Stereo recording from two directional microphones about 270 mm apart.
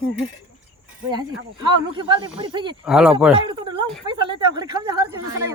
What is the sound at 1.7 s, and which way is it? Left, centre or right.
Speech, centre.